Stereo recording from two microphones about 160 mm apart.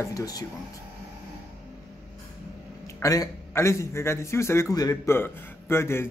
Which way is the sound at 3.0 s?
20° left (ahead or behind).